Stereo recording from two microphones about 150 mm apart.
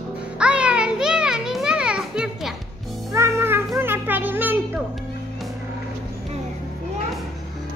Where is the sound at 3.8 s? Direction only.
15° right (ahead or behind).